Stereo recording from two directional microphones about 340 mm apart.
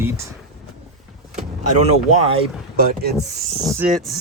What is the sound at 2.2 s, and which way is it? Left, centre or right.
Speech, centre.